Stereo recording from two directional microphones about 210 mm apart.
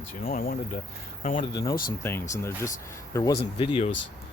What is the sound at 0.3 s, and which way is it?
Speech, 45° left (ahead or behind).